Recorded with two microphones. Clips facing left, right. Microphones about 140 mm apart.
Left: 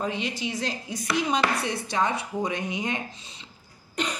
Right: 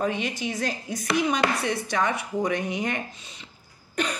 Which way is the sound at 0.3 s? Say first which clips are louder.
Right 1 dB; 55° right (ahead or behind).